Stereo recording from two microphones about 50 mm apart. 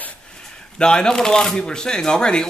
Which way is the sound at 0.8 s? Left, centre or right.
Centre.